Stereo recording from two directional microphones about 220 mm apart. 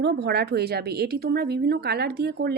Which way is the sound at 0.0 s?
50° right (ahead or behind).